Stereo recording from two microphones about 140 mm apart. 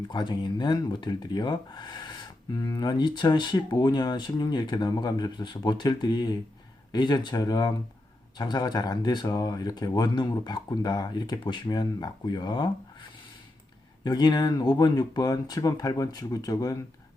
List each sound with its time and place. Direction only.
0.1 s speech: 30° left (ahead or behind)